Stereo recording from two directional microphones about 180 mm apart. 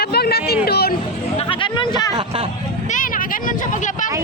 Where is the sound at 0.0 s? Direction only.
60° left (ahead or behind).